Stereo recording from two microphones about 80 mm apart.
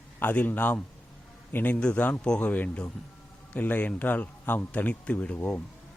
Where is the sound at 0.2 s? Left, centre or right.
Left.